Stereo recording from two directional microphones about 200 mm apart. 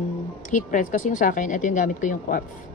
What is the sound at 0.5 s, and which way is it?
Speech, 40° left (ahead or behind).